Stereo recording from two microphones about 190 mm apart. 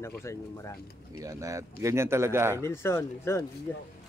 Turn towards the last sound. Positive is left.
turn(degrees=10)  # may be behind; listen again after turning